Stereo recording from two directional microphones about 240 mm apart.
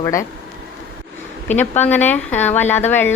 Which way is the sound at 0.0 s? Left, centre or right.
Centre.